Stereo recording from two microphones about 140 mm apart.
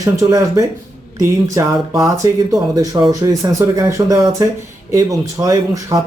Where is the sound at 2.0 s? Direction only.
25° right (ahead or behind).